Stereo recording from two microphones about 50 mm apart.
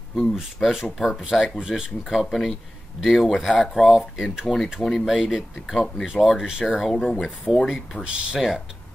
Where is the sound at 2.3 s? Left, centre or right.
Centre.